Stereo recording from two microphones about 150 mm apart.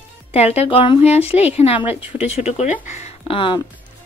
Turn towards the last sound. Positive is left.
turn(degrees=35)  # may be behind; listen again after turning